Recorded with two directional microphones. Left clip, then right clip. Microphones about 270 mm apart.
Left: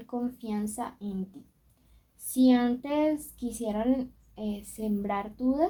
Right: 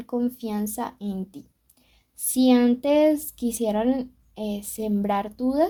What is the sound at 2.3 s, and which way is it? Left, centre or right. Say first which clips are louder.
A woman's voice: right 5 dB; right.